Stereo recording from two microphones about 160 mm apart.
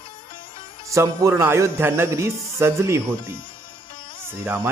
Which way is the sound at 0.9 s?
20° right (ahead or behind).